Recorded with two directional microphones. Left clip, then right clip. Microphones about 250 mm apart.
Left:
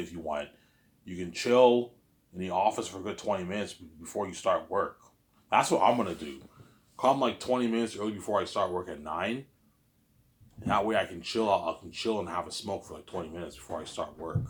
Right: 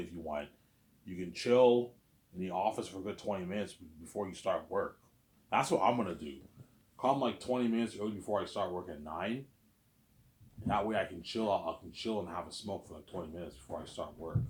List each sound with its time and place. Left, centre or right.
0.0 s speech: centre
10.7 s speech: left